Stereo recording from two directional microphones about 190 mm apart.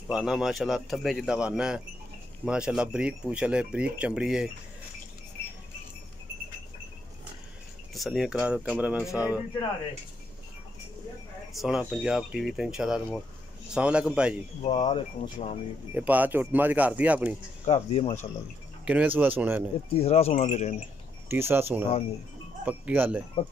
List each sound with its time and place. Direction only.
0.1 s speech: centre (ahead or behind)
7.9 s speech: centre (ahead or behind)
9.0 s speech: 15° left (ahead or behind)
11.5 s speech: centre (ahead or behind)
14.6 s speech: 30° left (ahead or behind)
15.9 s speech: 10° right (ahead or behind)
17.6 s speech: 35° left (ahead or behind)
18.9 s speech: 10° right (ahead or behind)
19.9 s speech: 30° left (ahead or behind)
21.3 s speech: 10° right (ahead or behind)